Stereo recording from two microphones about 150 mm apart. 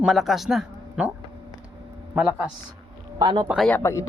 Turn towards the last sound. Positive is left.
turn(degrees=20)  # may be behind; listen again after turning